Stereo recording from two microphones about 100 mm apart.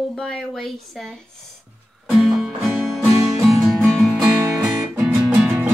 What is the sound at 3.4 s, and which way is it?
Music, centre (ahead or behind).